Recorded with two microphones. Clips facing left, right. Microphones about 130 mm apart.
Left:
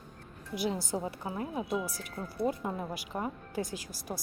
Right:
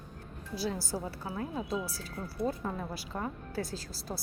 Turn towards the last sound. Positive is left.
turn(degrees=15)  # may be behind; listen again after turning